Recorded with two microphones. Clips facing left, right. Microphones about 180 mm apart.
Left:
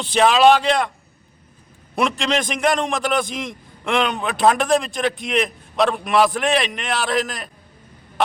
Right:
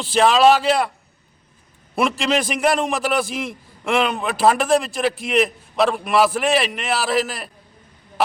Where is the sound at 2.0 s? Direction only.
Centre (ahead or behind).